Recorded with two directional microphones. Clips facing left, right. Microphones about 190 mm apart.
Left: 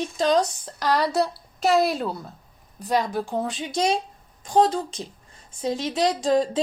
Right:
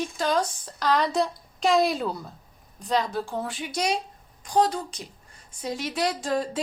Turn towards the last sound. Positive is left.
turn(degrees=20)  # may be behind; listen again after turning